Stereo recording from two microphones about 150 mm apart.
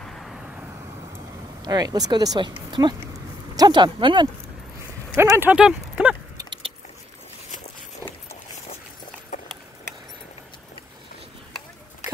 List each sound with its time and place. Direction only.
0.0 s vehicle: centre (ahead or behind)
1.6 s speech: 25° right (ahead or behind)
5.1 s speech: 20° right (ahead or behind)
6.3 s keys jangling: 30° right (ahead or behind)
8.0 s walk: 20° right (ahead or behind)